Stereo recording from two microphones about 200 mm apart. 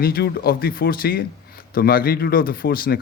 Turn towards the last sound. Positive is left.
turn(degrees=45)  # may be behind; listen again after turning